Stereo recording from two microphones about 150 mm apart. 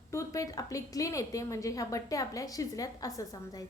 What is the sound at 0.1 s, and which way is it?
A woman's voice, 20° left (ahead or behind).